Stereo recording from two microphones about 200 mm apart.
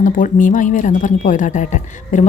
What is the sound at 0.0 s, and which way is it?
A woman's voice, 40° left (ahead or behind).